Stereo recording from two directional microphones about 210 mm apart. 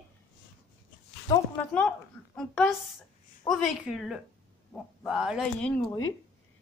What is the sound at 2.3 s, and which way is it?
Speech, centre (ahead or behind).